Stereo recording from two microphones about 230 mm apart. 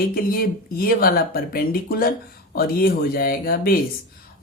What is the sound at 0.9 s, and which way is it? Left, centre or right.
Speech, left.